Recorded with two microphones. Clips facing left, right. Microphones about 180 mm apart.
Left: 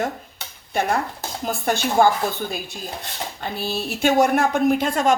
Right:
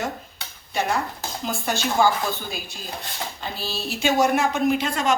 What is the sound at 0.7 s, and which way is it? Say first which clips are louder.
A woman's voice: left 2 dB; 55° left (ahead or behind).